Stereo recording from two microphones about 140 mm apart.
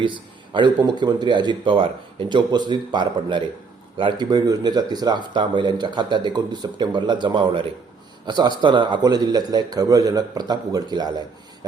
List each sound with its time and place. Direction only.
0.0 s a man's voice: 35° right (ahead or behind)